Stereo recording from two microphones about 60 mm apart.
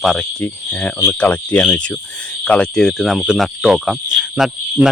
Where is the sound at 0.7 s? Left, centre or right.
Left.